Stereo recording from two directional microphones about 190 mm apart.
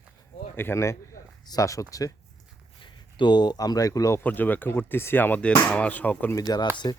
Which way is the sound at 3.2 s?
25° left (ahead or behind).